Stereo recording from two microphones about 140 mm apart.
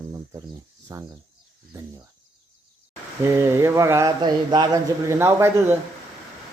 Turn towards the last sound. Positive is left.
turn(degrees=-20)  # may be behind; listen again after turning